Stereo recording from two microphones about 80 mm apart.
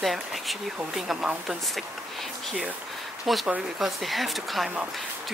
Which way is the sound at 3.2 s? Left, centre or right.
Centre.